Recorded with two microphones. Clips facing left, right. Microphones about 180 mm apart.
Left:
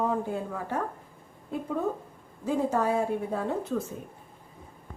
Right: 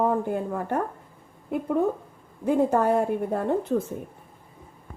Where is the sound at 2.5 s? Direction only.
60° right (ahead or behind).